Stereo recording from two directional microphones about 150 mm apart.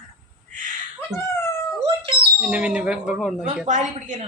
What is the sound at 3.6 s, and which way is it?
Speech, 55° right (ahead or behind).